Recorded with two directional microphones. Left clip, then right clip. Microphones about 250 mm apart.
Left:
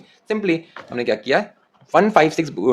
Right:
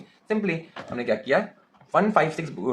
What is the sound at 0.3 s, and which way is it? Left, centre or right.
Speech, left.